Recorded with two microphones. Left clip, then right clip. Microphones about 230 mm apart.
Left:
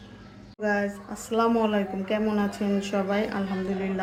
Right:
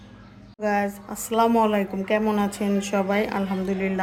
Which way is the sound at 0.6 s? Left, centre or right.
Right.